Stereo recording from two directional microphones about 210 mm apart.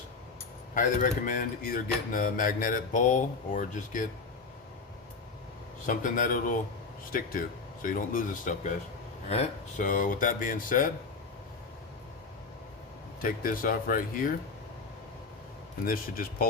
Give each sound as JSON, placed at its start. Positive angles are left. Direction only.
{"t": 0.7, "sound": "speech", "side_deg": 35}
{"t": 5.8, "sound": "speech", "side_deg": 40}
{"t": 13.2, "sound": "speech", "side_deg": 40}
{"t": 15.9, "sound": "speech", "side_deg": 45}